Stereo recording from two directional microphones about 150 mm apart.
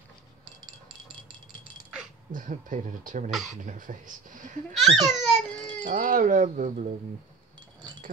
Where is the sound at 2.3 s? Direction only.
60° right (ahead or behind).